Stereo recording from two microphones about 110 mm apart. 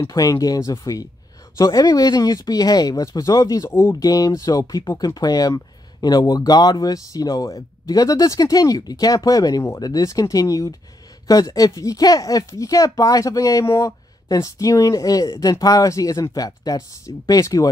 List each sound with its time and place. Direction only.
0.1 s speech: 35° left (ahead or behind)